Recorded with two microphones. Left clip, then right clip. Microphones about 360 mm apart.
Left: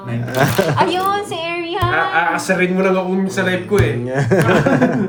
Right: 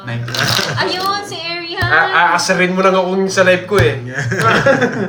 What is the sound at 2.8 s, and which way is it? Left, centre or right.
Speech, right.